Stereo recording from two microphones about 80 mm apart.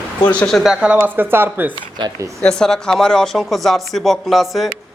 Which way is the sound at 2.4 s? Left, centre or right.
Centre.